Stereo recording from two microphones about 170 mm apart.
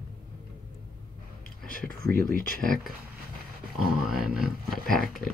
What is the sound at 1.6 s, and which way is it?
Speech, 55° left (ahead or behind).